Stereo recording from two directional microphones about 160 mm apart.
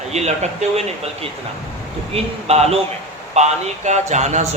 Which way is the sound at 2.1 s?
40° right (ahead or behind).